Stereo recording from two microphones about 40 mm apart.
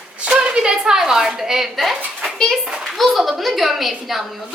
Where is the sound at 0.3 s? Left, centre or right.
Right.